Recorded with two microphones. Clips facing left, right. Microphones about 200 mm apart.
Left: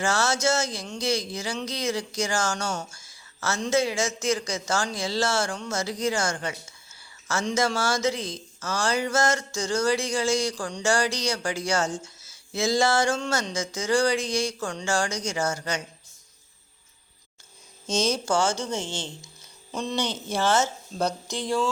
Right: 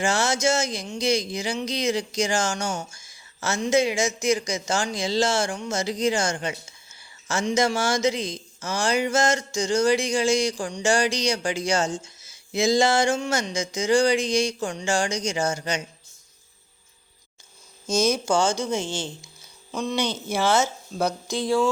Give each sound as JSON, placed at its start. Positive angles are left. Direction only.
{"t": 0.0, "sound": "speech", "side_deg": -15}
{"t": 17.9, "sound": "a woman's voice", "side_deg": -10}